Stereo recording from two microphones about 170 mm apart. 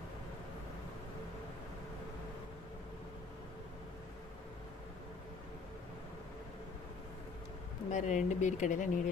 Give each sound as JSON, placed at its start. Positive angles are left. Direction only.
{"t": 7.9, "sound": "speech", "side_deg": 45}